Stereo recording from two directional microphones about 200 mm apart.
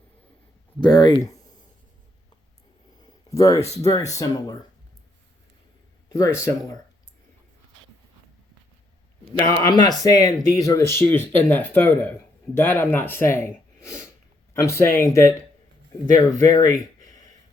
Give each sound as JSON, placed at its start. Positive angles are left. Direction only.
{"t": 0.8, "sound": "speech", "side_deg": 20}
{"t": 3.0, "sound": "a sound", "side_deg": 20}
{"t": 3.8, "sound": "speech", "side_deg": 15}
{"t": 6.1, "sound": "speech", "side_deg": 15}
{"t": 9.6, "sound": "speech", "side_deg": 20}
{"t": 16.7, "sound": "a sound", "side_deg": 20}